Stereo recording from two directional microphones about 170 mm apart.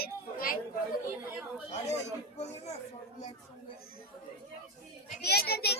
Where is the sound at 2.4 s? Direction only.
40° left (ahead or behind).